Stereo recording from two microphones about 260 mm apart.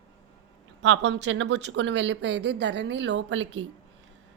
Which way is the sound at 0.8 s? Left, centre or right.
Right.